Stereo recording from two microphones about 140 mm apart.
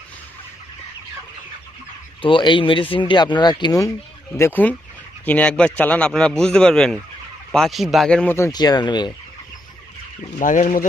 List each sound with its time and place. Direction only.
2.2 s speech: 35° left (ahead or behind)
4.4 s a man's voice: 15° left (ahead or behind)
8.4 s speech: 25° left (ahead or behind)
10.3 s speech: 60° left (ahead or behind)